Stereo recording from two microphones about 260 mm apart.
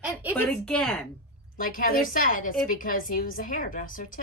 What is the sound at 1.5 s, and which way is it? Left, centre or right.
A woman's voice, left.